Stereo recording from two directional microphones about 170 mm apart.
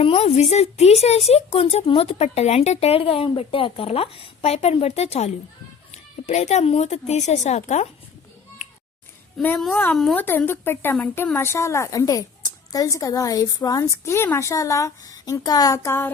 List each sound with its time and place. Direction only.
0.0 s a woman's voice: 35° left (ahead or behind)
9.4 s speech: 5° left (ahead or behind)